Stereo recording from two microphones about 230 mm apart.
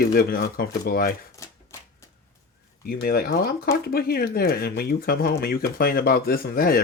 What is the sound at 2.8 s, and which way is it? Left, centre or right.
Speech, left.